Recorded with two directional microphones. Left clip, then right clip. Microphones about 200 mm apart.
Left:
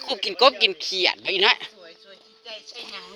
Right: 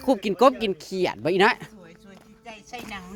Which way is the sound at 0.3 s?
25° right (ahead or behind).